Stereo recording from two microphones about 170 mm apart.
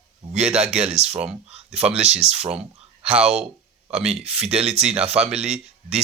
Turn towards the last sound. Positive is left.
turn(degrees=-40)  # may be behind; listen again after turning